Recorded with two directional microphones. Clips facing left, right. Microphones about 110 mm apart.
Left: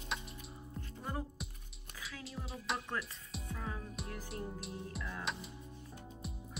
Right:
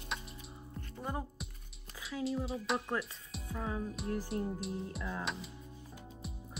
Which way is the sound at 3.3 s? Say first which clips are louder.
Right 5 dB; centre (ahead or behind).